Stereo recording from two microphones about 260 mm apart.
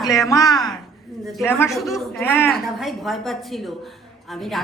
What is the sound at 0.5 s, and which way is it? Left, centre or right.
A woman's voice, centre.